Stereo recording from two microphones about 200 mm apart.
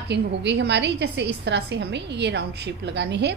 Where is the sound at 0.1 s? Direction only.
60° right (ahead or behind).